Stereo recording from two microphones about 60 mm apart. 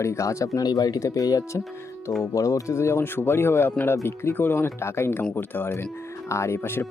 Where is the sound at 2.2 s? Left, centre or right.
Left.